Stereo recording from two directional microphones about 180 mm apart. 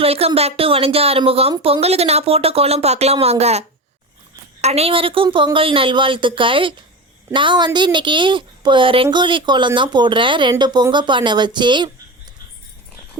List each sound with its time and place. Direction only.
0.0 s a woman's voice: 35° right (ahead or behind)
4.6 s a woman's voice: 35° right (ahead or behind)